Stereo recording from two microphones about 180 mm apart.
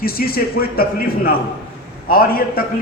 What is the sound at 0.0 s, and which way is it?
Speech, 55° left (ahead or behind).